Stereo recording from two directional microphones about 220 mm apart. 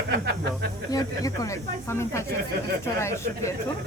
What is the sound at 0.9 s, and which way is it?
Speech, 15° left (ahead or behind).